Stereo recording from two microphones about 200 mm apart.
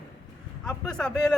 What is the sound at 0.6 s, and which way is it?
Speech, 5° left (ahead or behind).